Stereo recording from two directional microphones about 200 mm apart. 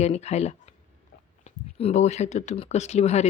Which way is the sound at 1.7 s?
30° left (ahead or behind).